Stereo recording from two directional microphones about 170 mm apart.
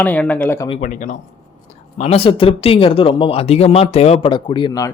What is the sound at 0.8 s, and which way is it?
Speech, 45° left (ahead or behind).